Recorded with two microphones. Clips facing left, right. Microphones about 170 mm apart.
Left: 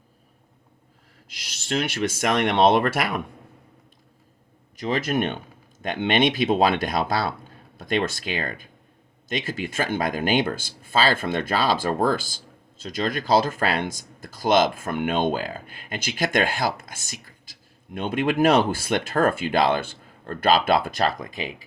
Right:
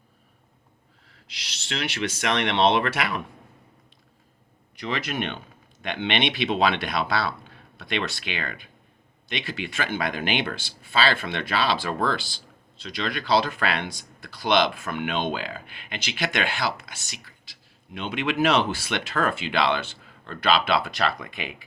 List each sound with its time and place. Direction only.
1.3 s speech: 50° left (ahead or behind)
4.8 s speech: 45° left (ahead or behind)